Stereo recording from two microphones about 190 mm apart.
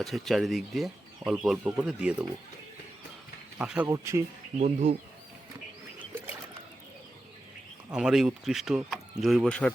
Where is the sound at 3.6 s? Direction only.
5° right (ahead or behind).